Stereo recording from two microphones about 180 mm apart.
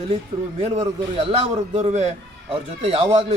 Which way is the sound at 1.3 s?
35° right (ahead or behind).